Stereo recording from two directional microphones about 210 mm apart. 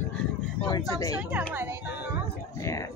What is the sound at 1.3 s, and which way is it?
Speech, 10° right (ahead or behind).